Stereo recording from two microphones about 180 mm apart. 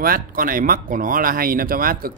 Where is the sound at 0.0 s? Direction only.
50° right (ahead or behind).